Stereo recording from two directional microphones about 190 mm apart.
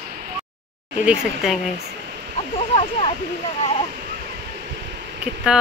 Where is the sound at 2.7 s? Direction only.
30° left (ahead or behind).